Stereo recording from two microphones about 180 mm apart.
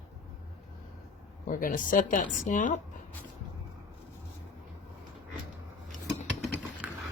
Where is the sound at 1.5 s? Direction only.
50° left (ahead or behind).